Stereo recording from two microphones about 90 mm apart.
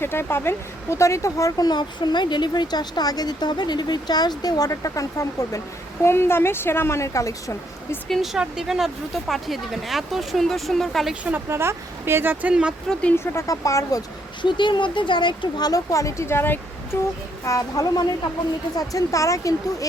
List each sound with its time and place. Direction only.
0.0 s speech: 25° left (ahead or behind)
8.0 s speech: centre (ahead or behind)
11.1 s speech: 15° right (ahead or behind)
11.4 s speech: 30° right (ahead or behind); by 12.7 s 10° right (ahead or behind)
12.9 s speech: 10° left (ahead or behind)
13.1 s speech: 35° left (ahead or behind)
14.4 s speech: 60° left (ahead or behind); by 17.0 s 25° left (ahead or behind)
17.4 s speech: 40° left (ahead or behind)